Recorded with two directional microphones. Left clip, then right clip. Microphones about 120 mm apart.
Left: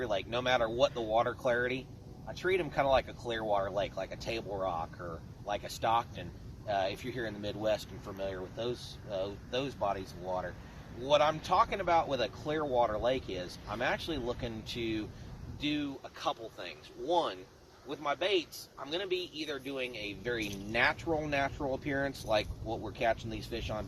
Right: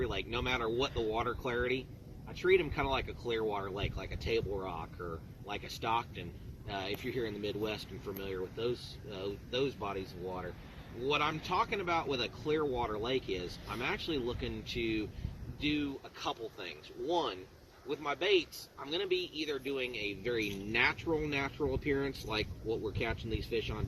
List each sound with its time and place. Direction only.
0.1 s speech: 40° left (ahead or behind)
11.1 s speech: 35° left (ahead or behind)